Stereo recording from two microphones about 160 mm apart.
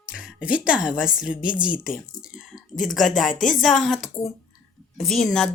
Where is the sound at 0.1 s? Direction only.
5° right (ahead or behind).